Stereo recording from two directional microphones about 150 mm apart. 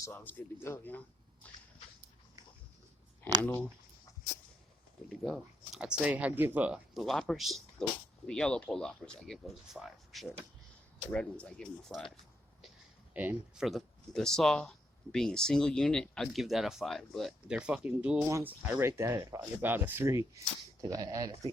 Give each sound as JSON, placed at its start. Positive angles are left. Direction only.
{"t": 0.0, "sound": "a man's voice", "side_deg": 15}
{"t": 3.4, "sound": "a man's voice", "side_deg": 10}
{"t": 5.0, "sound": "a man's voice", "side_deg": 0}
{"t": 13.1, "sound": "speech", "side_deg": -10}
{"t": 13.7, "sound": "speech", "side_deg": 0}